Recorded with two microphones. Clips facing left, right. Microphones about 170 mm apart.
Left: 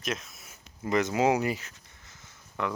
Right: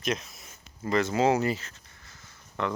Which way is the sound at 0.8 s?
15° left (ahead or behind).